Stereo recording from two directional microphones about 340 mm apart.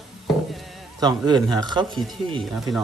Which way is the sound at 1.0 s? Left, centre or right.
Centre.